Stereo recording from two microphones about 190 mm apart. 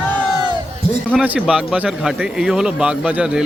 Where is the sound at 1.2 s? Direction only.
5° right (ahead or behind).